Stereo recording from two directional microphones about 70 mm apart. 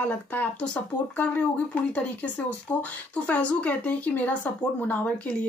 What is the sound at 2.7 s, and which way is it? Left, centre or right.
A woman's voice, left.